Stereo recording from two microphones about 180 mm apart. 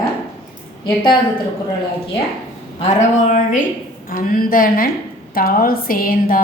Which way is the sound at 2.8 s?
40° left (ahead or behind).